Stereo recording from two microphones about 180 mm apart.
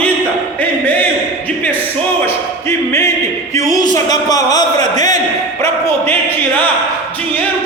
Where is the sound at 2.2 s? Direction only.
15° left (ahead or behind).